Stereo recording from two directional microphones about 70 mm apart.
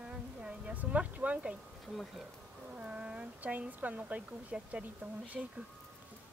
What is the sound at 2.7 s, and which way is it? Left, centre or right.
Speech, centre.